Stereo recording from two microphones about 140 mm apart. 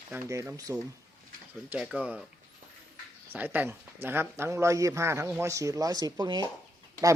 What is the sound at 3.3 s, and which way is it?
Speech, 10° right (ahead or behind).